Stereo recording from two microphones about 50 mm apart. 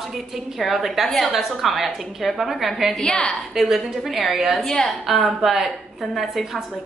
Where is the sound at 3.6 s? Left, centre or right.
Centre.